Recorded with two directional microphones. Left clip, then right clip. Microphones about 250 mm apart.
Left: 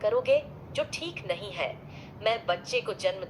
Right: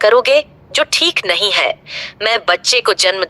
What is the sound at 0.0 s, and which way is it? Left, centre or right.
A woman's voice, right.